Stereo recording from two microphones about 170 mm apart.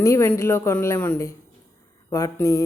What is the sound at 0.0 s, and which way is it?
A woman's voice, 15° left (ahead or behind).